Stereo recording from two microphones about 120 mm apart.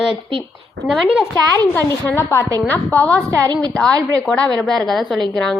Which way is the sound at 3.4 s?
35° right (ahead or behind).